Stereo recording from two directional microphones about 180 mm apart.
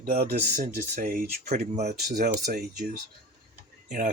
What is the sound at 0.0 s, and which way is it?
Speech, 55° right (ahead or behind).